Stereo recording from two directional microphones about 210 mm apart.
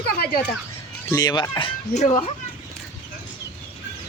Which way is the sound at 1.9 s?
30° left (ahead or behind).